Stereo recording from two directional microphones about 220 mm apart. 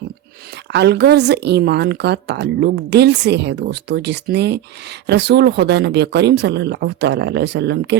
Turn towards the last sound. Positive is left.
turn(degrees=-50)  # may be behind; listen again after turning